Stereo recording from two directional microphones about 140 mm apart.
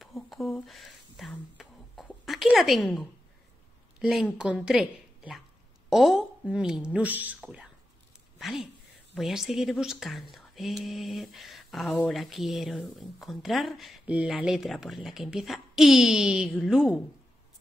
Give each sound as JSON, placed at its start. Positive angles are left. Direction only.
{"t": 0.0, "sound": "speech", "side_deg": 0}
{"t": 1.6, "sound": "a sound", "side_deg": 0}
{"t": 2.2, "sound": "a woman's voice", "side_deg": 0}
{"t": 4.0, "sound": "a woman's voice", "side_deg": -5}